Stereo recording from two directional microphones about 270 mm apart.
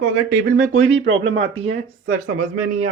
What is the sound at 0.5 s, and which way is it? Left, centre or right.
Speech, right.